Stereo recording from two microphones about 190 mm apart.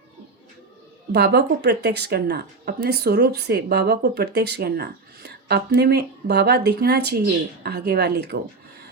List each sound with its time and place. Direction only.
1.1 s speech: 60° right (ahead or behind)